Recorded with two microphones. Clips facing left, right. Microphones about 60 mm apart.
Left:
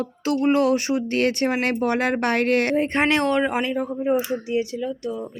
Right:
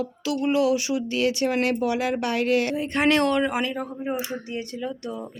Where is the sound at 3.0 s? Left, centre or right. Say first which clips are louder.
Right 3 dB; left.